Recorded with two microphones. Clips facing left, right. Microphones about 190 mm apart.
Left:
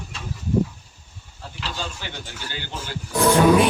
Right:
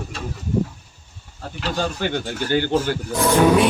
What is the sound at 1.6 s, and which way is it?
Speech, 55° right (ahead or behind).